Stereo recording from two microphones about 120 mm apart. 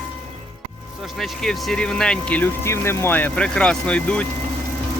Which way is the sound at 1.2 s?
5° left (ahead or behind).